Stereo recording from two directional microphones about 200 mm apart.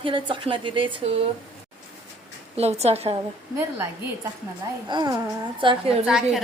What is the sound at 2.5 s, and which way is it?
Speech, 30° right (ahead or behind).